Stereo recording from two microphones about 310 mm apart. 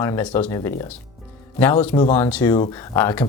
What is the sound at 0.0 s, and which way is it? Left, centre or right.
Speech, centre.